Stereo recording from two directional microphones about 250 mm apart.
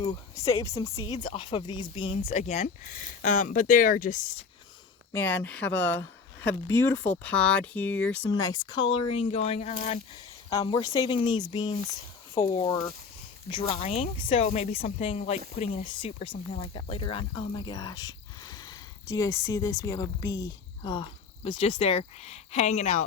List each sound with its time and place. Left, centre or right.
0.0 s speech: centre; by 4.4 s left
5.1 s speech: centre; by 23.0 s left